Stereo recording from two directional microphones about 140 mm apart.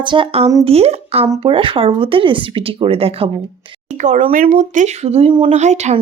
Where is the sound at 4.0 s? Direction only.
60° right (ahead or behind); by 5.5 s 40° right (ahead or behind).